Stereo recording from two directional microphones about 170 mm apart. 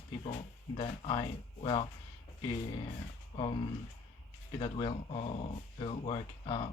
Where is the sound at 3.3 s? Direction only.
30° left (ahead or behind).